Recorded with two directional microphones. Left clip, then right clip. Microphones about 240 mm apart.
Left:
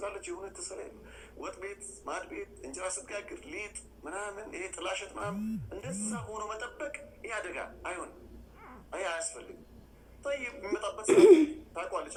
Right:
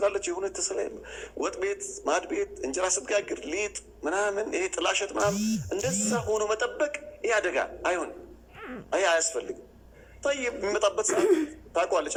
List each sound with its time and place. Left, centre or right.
0.0 s a man's voice: right
11.0 s speech: centre
11.7 s a man's voice: right